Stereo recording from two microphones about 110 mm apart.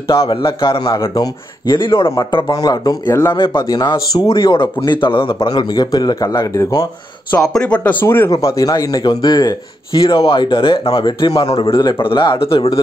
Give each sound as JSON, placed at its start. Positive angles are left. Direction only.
{"t": 0.1, "sound": "speech", "side_deg": 50}
{"t": 0.8, "sound": "speech", "side_deg": 35}
{"t": 3.3, "sound": "speech", "side_deg": 45}
{"t": 3.6, "sound": "speech", "side_deg": 35}
{"t": 7.5, "sound": "speech", "side_deg": 10}
{"t": 9.9, "sound": "speech", "side_deg": 50}
{"t": 11.4, "sound": "speech", "side_deg": 55}